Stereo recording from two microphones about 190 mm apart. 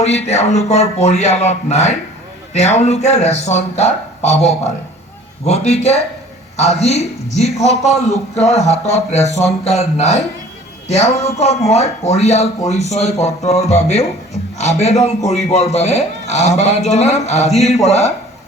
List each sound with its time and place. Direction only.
0.0 s a man's voice: 35° left (ahead or behind)